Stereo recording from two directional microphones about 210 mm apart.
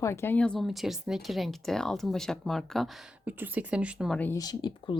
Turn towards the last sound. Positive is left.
turn(degrees=20)  # may be behind; listen again after turning